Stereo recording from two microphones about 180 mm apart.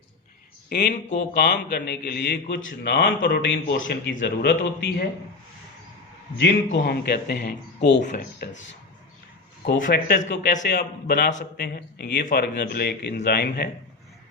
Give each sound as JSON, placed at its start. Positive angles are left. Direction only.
{"t": 0.7, "sound": "a man's voice", "side_deg": 70}
{"t": 6.3, "sound": "a man's voice", "side_deg": 90}
{"t": 8.0, "sound": "speech", "side_deg": 45}
{"t": 9.8, "sound": "a man's voice", "side_deg": 65}